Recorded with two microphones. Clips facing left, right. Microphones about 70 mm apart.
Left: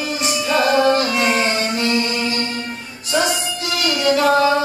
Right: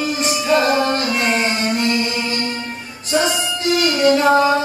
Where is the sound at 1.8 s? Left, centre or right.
Right.